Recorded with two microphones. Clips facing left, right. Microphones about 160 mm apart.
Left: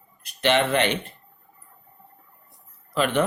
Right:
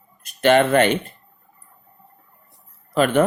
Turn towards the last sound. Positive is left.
turn(degrees=-45)  # may be behind; listen again after turning